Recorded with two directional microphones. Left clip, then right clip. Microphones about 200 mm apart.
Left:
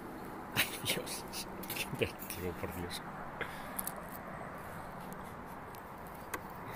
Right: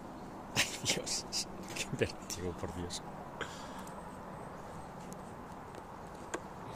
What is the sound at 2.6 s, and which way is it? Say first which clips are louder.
Speech: even; 15° right (ahead or behind).